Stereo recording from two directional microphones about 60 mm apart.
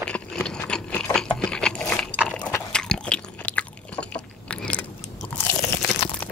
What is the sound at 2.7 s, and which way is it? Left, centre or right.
Chewing, centre.